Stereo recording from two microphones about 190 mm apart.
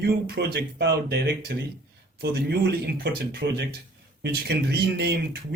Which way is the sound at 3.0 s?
60° right (ahead or behind).